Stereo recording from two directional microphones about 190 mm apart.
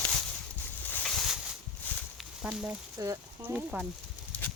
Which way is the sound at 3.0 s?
15° right (ahead or behind).